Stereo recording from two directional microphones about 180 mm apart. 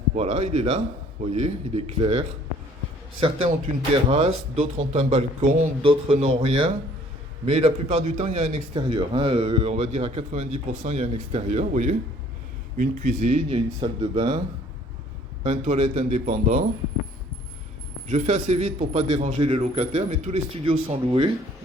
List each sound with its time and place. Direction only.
0.1 s a man's voice: 35° right (ahead or behind)
8.7 s a man's voice: 25° right (ahead or behind)
13.8 s speech: 30° right (ahead or behind)
15.4 s a man's voice: 40° right (ahead or behind)
18.1 s a man's voice: 40° right (ahead or behind)